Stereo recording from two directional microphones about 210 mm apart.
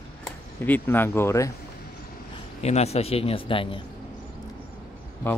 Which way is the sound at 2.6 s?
30° left (ahead or behind).